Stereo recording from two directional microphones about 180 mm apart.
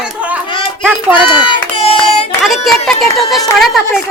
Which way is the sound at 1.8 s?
30° left (ahead or behind).